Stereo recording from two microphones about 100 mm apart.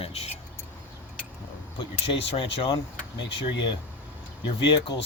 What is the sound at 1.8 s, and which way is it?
Speech, 60° left (ahead or behind).